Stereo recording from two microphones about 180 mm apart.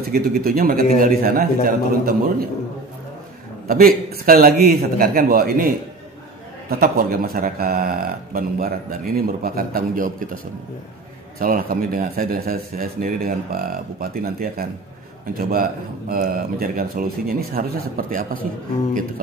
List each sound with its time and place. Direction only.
0.1 s a man's voice: 55° right (ahead or behind)
3.6 s a man's voice: 55° right (ahead or behind)
6.7 s speech: 55° right (ahead or behind)